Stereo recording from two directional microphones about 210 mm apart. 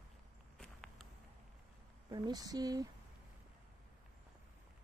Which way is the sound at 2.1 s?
20° right (ahead or behind).